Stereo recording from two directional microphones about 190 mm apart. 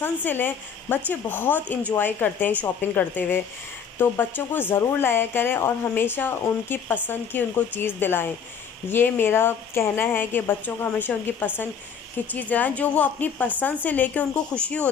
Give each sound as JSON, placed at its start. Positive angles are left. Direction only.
{"t": 0.0, "sound": "speech", "side_deg": 10}